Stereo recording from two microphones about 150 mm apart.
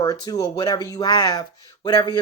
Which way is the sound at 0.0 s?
25° left (ahead or behind).